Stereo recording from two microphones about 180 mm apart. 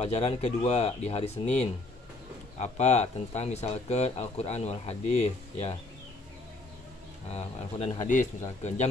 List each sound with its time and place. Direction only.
0.0 s speech: 35° left (ahead or behind)
2.6 s speech: 40° left (ahead or behind)
7.3 s speech: 40° left (ahead or behind)